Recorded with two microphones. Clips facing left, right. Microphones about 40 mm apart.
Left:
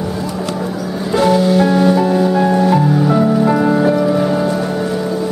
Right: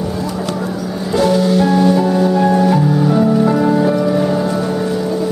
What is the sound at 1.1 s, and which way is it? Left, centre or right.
Music, centre.